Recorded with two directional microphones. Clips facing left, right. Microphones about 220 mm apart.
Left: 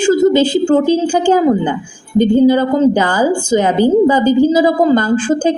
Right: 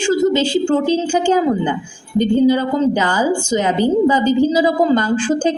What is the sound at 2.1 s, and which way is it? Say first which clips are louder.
A woman's voice: left 4 dB; 50° left (ahead or behind).